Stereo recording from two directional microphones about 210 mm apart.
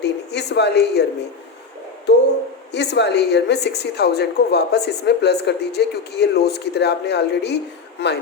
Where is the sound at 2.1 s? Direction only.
55° left (ahead or behind).